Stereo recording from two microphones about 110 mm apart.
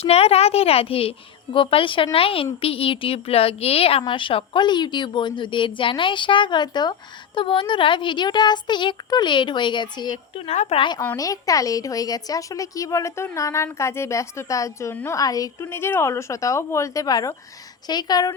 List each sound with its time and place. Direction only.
0.0 s a woman's voice: 70° left (ahead or behind); by 10.4 s 40° left (ahead or behind)
10.4 s speech: 80° left
10.8 s a child's voice: 45° left (ahead or behind)
11.2 s a woman's voice: 30° left (ahead or behind)
15.5 s a woman's voice: 20° left (ahead or behind)